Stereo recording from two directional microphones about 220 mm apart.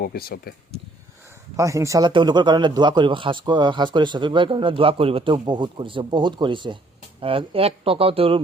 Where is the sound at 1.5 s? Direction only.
15° right (ahead or behind).